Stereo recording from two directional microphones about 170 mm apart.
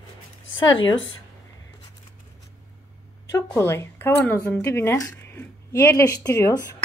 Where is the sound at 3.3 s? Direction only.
15° left (ahead or behind).